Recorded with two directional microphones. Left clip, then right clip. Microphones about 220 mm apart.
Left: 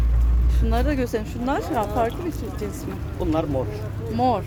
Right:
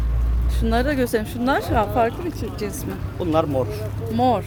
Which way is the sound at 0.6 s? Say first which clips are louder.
Right 4 dB; 25° right (ahead or behind).